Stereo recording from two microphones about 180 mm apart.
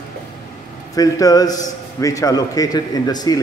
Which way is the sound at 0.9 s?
20° left (ahead or behind).